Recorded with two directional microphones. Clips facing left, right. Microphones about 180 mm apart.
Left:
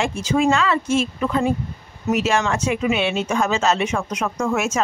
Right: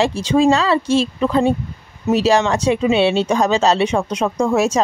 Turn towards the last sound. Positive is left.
turn(degrees=-35)  # may be behind; listen again after turning